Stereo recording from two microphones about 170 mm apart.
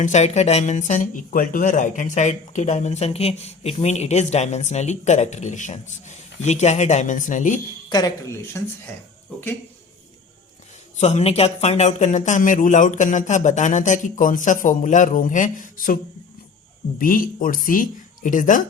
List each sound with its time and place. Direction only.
0.0 s speech: 45° left (ahead or behind)
7.9 s speech: 20° left (ahead or behind)
10.9 s speech: 40° left (ahead or behind)
17.0 s speech: 55° left (ahead or behind)